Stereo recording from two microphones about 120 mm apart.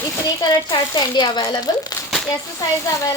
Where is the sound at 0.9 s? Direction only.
35° left (ahead or behind).